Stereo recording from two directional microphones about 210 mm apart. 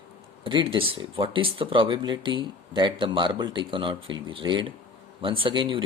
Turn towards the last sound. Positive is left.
turn(degrees=-25)  # may be behind; listen again after turning